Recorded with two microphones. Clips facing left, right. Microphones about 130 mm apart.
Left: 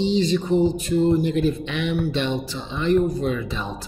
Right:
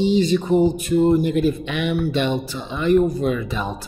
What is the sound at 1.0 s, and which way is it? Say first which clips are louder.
Speech: right 3 dB; 55° right (ahead or behind).